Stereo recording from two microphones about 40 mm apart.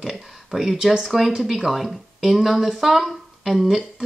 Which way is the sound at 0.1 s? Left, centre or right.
Centre.